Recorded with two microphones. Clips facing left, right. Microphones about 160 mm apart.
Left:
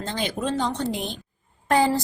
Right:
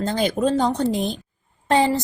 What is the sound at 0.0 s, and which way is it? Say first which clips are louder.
Speech: right 7 dB; 40° right (ahead or behind).